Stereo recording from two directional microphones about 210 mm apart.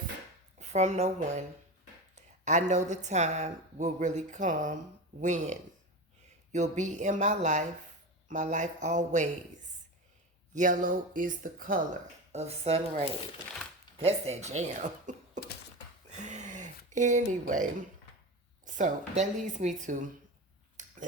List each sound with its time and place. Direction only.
0.6 s speech: 35° right (ahead or behind)
10.5 s speech: 40° right (ahead or behind)
14.3 s speech: 30° right (ahead or behind)
15.4 s a sound: 35° right (ahead or behind)
18.6 s a woman's voice: 35° right (ahead or behind)
20.7 s a sound: 35° right (ahead or behind)